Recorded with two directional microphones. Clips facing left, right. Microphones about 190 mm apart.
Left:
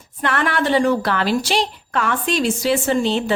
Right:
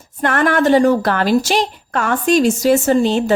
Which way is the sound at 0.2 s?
45° right (ahead or behind).